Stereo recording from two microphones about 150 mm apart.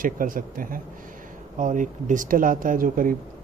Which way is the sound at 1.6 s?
55° right (ahead or behind).